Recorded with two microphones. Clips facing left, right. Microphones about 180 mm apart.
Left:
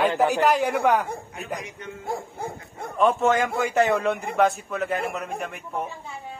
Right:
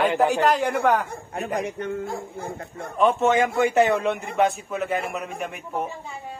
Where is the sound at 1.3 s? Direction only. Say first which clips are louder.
Right 7 dB; 55° right (ahead or behind).